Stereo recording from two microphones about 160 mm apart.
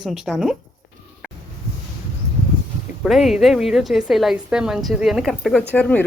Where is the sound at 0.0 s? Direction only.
5° right (ahead or behind).